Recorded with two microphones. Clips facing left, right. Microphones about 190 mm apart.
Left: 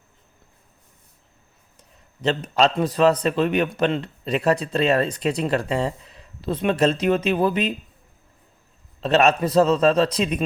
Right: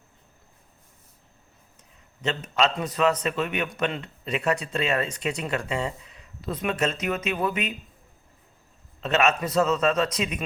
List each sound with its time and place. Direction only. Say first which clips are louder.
2.2 s a man's voice: left 5 dB; 35° left (ahead or behind)
9.0 s a man's voice: left 5 dB; 35° left (ahead or behind)